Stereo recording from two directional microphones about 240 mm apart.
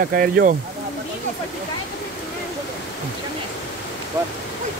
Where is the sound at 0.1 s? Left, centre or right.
Right.